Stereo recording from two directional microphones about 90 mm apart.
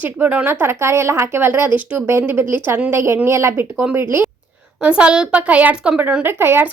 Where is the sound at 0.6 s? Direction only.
30° right (ahead or behind).